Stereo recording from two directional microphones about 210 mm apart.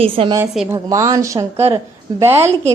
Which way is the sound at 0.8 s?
15° right (ahead or behind).